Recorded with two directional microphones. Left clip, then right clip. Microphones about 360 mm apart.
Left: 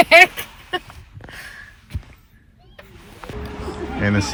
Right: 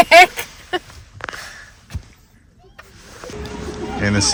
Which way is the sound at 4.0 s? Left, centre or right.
Centre.